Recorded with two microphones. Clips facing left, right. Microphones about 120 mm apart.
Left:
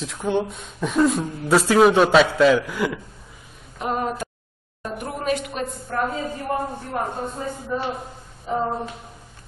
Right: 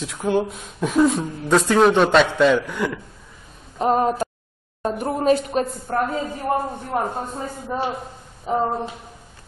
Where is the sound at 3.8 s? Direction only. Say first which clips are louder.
Right 6 dB; 40° right (ahead or behind).